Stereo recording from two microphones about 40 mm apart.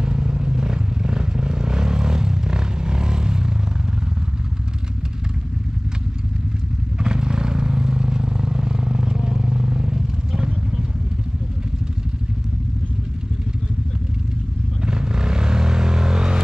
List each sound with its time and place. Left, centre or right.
0.0 s vehicle: centre
7.0 s vehicle: centre
14.8 s vehicle: centre